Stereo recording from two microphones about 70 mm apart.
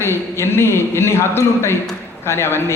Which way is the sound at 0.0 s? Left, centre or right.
Left.